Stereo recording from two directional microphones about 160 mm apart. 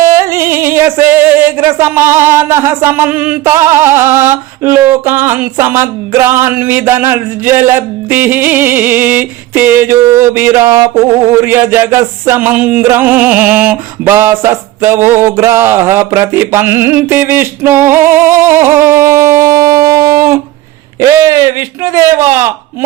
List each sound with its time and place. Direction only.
0.0 s music: 15° right (ahead or behind)
21.0 s a man's voice: 20° right (ahead or behind)